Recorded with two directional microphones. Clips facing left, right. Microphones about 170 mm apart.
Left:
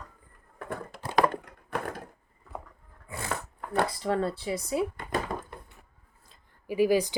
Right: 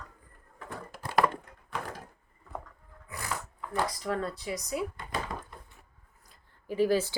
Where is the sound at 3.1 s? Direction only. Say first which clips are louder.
Left 3 dB; 25° left (ahead or behind).